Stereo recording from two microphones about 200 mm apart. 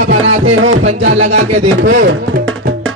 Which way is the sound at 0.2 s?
90° right.